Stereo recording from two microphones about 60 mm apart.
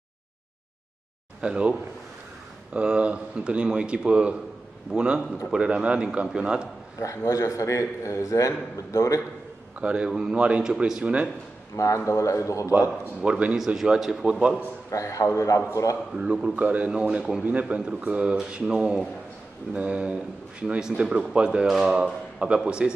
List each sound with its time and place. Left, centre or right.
1.4 s a man's voice: centre
7.0 s a man's voice: left
9.8 s a man's voice: centre
11.7 s a man's voice: left
13.2 s speech: centre
13.7 s a man's voice: centre
14.9 s a man's voice: left
16.1 s a man's voice: centre